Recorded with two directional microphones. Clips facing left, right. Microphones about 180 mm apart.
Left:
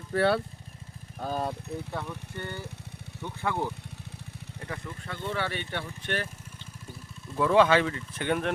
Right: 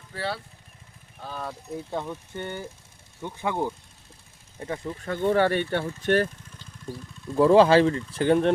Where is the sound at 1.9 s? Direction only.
20° right (ahead or behind).